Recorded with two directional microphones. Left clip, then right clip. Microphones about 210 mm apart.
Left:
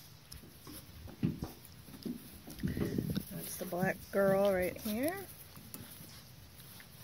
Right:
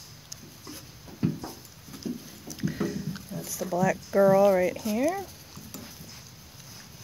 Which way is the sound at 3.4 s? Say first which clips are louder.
Right 10 dB; 5° right (ahead or behind).